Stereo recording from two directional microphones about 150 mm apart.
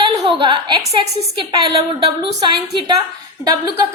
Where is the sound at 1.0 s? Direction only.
35° right (ahead or behind).